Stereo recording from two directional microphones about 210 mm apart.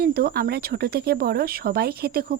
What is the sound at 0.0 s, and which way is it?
Speech, 45° right (ahead or behind).